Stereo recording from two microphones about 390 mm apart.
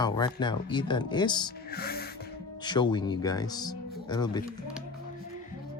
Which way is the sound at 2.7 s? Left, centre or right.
Centre.